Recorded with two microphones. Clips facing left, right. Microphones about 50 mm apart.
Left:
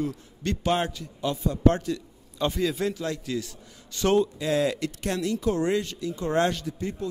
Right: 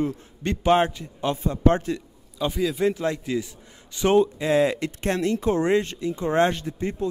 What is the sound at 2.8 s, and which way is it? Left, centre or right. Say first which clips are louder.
A man's voice: right 5 dB; right.